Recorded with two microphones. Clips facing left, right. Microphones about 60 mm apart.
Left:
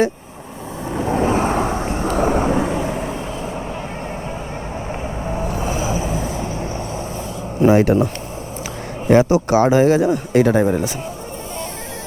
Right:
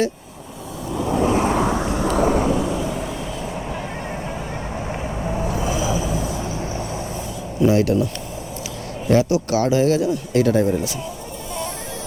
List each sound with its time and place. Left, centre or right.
0.9 s vehicle: left
5.5 s vehicle: left
7.6 s a man's voice: left